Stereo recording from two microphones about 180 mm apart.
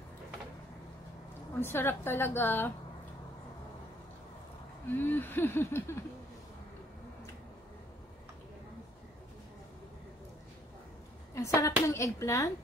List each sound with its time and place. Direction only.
1.6 s speech: 15° left (ahead or behind)
4.8 s speech: 10° left (ahead or behind)
11.3 s speech: 15° left (ahead or behind)